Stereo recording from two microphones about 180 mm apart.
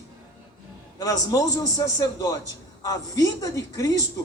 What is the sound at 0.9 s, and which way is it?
A man's voice, 20° left (ahead or behind).